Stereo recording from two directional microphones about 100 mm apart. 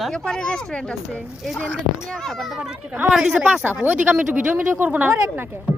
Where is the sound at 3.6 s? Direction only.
20° right (ahead or behind).